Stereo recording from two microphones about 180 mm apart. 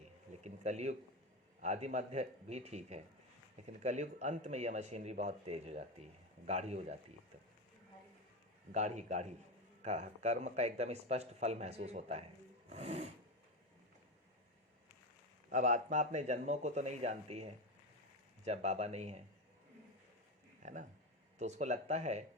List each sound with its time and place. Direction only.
0.4 s speech: 40° right (ahead or behind)
8.7 s speech: 40° right (ahead or behind)
12.6 s a sound: 40° right (ahead or behind)
15.4 s speech: 45° right (ahead or behind)
20.6 s a sound: 45° right (ahead or behind)
21.3 s speech: 40° right (ahead or behind)